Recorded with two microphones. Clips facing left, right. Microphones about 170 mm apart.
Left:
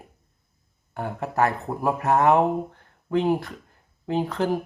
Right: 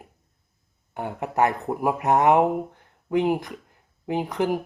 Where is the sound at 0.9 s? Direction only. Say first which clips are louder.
Right 1 dB; 20° right (ahead or behind).